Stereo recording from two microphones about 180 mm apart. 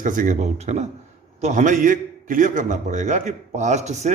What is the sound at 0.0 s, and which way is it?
A man's voice, 45° right (ahead or behind).